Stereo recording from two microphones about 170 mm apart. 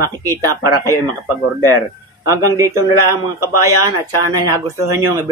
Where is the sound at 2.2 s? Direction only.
15° right (ahead or behind).